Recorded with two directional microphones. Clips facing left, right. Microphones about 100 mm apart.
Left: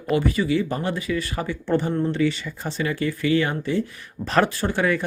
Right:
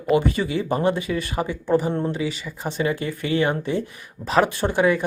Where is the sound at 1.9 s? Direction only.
25° right (ahead or behind).